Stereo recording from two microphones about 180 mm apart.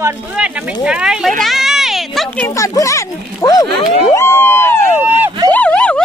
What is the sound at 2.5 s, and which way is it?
Speech, 20° left (ahead or behind).